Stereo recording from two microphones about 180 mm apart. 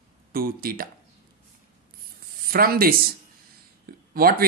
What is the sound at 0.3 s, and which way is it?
Speech, 55° right (ahead or behind).